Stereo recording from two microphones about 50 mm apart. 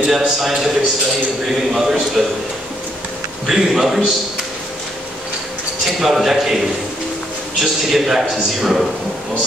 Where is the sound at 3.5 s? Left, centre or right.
Centre.